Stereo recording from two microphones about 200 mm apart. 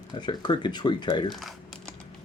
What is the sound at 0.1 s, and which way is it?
Speech, 20° left (ahead or behind).